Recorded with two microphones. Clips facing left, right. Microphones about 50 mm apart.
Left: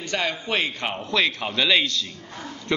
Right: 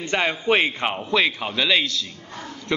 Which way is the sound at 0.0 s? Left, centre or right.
Right.